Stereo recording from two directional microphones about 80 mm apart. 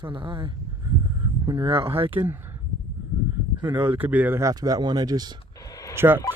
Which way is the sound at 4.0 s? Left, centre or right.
Right.